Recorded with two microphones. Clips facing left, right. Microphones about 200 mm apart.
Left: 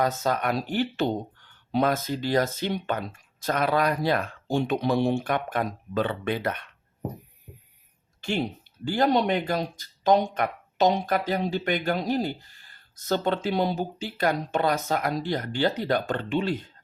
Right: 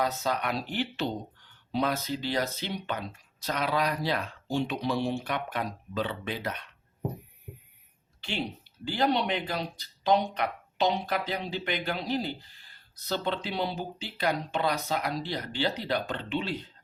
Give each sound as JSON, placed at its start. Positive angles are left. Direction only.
{"t": 0.0, "sound": "speech", "side_deg": 50}
{"t": 8.2, "sound": "speech", "side_deg": 45}